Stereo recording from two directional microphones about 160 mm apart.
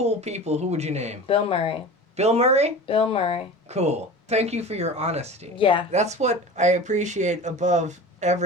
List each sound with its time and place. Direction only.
0.0 s speech: 45° right (ahead or behind)
1.3 s speech: 35° left (ahead or behind)
2.1 s speech: 40° right (ahead or behind)
2.8 s speech: 35° left (ahead or behind)
3.7 s speech: 45° right (ahead or behind)
5.5 s speech: 35° left (ahead or behind)
5.9 s speech: 45° right (ahead or behind)